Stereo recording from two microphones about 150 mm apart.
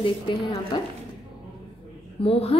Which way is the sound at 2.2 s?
40° left (ahead or behind).